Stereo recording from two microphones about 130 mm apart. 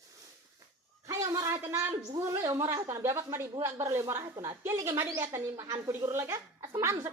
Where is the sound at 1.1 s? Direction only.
20° right (ahead or behind).